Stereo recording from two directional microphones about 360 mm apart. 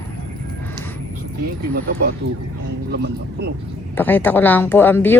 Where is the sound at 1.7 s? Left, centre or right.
Right.